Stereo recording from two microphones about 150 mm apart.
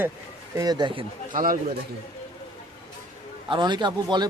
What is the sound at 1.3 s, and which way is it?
Speech, 65° right (ahead or behind).